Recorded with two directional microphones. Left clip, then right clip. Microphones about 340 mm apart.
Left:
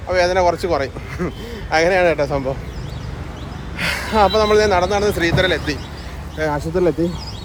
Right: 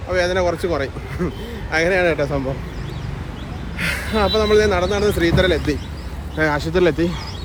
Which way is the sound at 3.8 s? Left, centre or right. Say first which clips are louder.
Left 4 dB; centre.